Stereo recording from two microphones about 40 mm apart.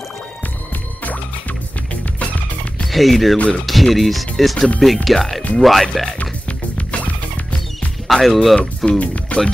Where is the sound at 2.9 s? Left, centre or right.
Centre.